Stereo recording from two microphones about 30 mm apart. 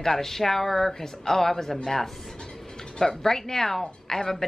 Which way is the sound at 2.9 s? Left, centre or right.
Centre.